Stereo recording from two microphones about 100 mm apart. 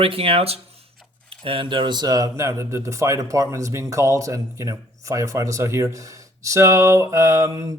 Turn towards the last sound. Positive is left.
turn(degrees=-30)  # may be behind; listen again after turning